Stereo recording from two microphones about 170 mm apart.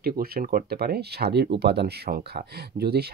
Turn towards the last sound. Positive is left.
turn(degrees=-70)  # may be behind; listen again after turning